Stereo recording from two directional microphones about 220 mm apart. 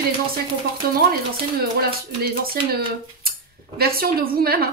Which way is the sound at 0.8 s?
45° right (ahead or behind).